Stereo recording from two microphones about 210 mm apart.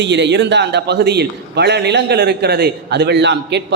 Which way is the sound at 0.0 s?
55° right (ahead or behind).